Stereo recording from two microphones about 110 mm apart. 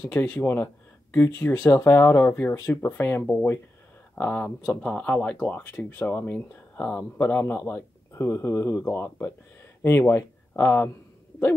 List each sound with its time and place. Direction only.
0.1 s speech: 15° left (ahead or behind)